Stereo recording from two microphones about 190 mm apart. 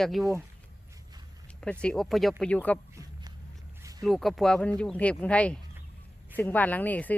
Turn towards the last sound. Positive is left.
turn(degrees=10)  # may be behind; listen again after turning